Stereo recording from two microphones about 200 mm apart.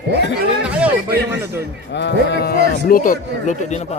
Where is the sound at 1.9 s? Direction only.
60° left (ahead or behind).